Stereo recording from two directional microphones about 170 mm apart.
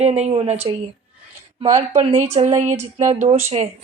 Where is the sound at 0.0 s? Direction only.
40° right (ahead or behind).